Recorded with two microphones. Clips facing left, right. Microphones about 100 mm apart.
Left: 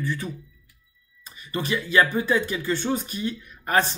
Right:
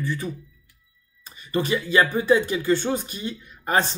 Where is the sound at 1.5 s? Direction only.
20° right (ahead or behind).